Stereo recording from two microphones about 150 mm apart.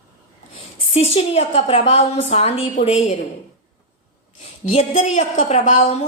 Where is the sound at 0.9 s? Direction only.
45° left (ahead or behind).